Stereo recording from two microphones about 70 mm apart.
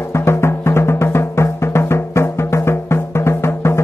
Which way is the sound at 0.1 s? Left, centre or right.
Left.